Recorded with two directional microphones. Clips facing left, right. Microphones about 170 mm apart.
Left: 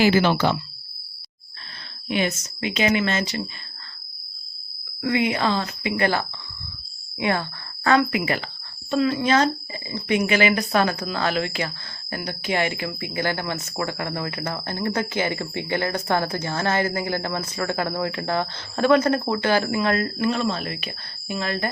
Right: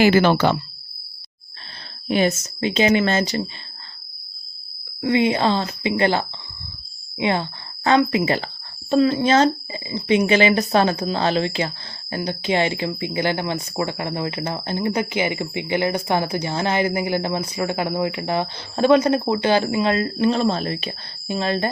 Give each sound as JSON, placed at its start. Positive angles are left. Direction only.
{"t": 0.0, "sound": "speech", "side_deg": -55}
{"t": 2.0, "sound": "speech", "side_deg": -35}
{"t": 5.0, "sound": "speech", "side_deg": -25}